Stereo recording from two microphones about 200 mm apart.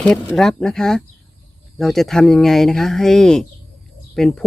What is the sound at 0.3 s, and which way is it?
Speech, centre (ahead or behind).